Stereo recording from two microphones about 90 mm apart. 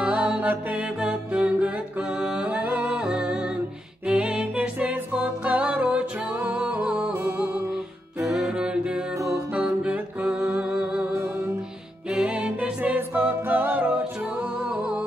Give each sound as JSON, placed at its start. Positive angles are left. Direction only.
{"t": 0.0, "sound": "music", "side_deg": -10}
{"t": 4.1, "sound": "a capella", "side_deg": -10}
{"t": 8.3, "sound": "music", "side_deg": -5}
{"t": 12.1, "sound": "a capella", "side_deg": -10}